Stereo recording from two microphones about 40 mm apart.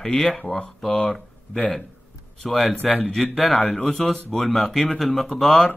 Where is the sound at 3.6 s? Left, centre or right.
Centre.